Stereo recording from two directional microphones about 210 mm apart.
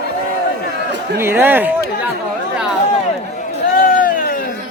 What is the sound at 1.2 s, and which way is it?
Speech, 10° right (ahead or behind).